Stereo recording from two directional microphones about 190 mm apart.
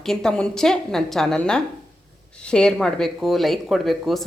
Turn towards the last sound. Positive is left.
turn(degrees=0)  # may be behind; listen again after turning